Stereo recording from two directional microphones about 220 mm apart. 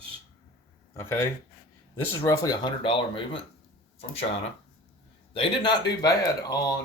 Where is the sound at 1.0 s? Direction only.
10° left (ahead or behind).